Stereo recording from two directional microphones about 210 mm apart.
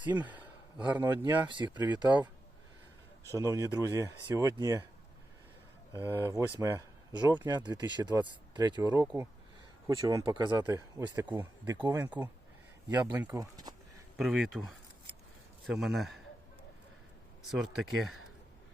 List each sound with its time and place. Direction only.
0.0 s a sound: 10° right (ahead or behind)
1.5 s speech: 20° right (ahead or behind)
3.3 s speech: 15° right (ahead or behind)
5.9 s speech: 10° right (ahead or behind)
12.9 s speech: 10° right (ahead or behind)
14.2 s a man's voice: centre (ahead or behind)
17.5 s speech: centre (ahead or behind)